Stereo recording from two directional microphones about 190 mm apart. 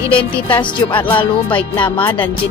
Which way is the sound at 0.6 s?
25° left (ahead or behind).